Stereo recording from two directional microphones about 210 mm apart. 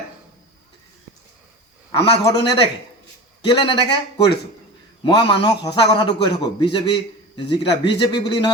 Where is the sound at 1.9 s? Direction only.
20° left (ahead or behind).